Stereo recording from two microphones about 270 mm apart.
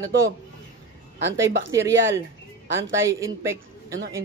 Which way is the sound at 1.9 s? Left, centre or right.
Right.